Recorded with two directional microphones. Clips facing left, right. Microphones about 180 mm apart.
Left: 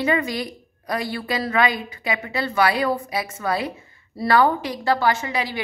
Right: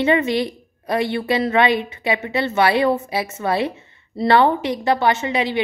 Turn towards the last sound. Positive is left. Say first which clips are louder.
# right 5 dB
turn(degrees=-25)  # may be behind; listen again after turning